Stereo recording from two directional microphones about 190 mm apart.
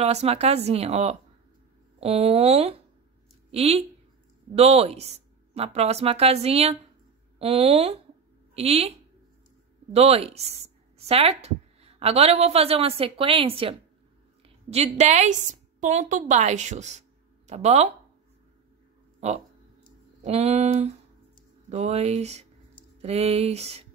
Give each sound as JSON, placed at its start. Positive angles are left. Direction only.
{"t": 0.0, "sound": "a woman's voice", "side_deg": -35}
{"t": 9.9, "sound": "a woman's voice", "side_deg": -35}
{"t": 19.1, "sound": "a sound", "side_deg": -35}
{"t": 20.2, "sound": "a woman's voice", "side_deg": -35}